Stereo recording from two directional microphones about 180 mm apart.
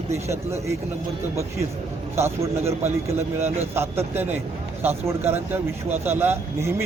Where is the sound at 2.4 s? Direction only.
35° right (ahead or behind).